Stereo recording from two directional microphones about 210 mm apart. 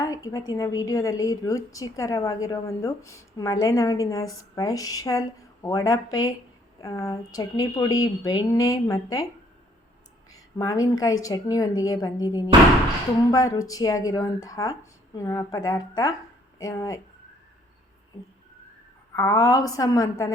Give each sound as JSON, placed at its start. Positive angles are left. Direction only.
{"t": 0.3, "sound": "a woman's voice", "side_deg": 15}
{"t": 10.3, "sound": "a woman's voice", "side_deg": 15}
{"t": 19.1, "sound": "a woman's voice", "side_deg": 15}